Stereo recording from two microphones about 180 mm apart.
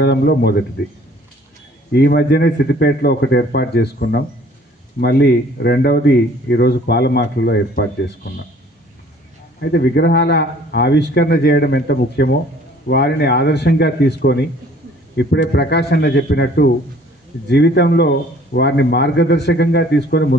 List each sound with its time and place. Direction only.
0.0 s speech: 65° left (ahead or behind)
1.9 s speech: 65° left (ahead or behind)
9.6 s speech: 65° left (ahead or behind)